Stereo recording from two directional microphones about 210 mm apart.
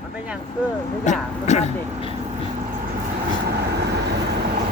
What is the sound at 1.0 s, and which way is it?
Speech, 35° left (ahead or behind).